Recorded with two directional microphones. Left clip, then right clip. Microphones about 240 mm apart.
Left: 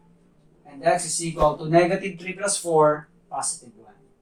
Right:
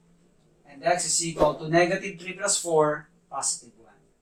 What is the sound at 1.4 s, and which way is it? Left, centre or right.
Speech, centre.